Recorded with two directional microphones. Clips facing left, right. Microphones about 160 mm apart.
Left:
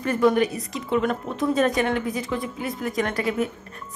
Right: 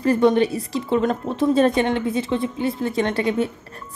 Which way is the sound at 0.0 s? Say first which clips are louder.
Right 3 dB; 30° right (ahead or behind).